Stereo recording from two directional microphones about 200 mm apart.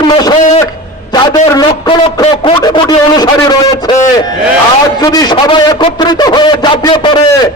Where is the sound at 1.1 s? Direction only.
20° left (ahead or behind).